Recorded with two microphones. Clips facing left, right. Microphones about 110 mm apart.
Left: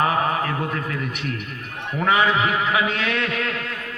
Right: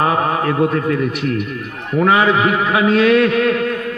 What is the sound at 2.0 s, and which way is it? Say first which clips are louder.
A man's voice: right 6 dB; 40° right (ahead or behind).